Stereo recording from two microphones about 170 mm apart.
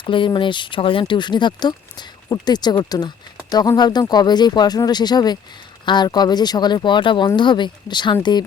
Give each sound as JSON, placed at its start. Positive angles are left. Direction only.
{"t": 0.0, "sound": "speech", "side_deg": 30}